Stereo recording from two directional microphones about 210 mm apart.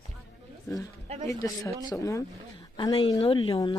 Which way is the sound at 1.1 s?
30° right (ahead or behind).